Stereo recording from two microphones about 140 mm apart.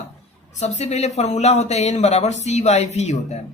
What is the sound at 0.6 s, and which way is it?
Speech, 50° left (ahead or behind).